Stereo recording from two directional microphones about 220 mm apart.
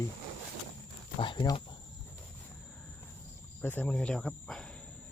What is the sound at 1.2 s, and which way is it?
Speech, 20° left (ahead or behind).